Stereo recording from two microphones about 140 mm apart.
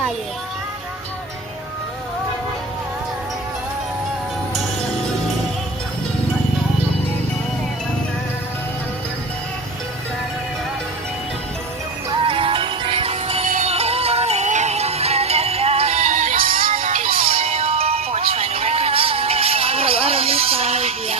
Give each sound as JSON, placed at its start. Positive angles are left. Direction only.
{"t": 12.2, "sound": "music", "side_deg": -40}
{"t": 17.1, "sound": "music", "side_deg": -40}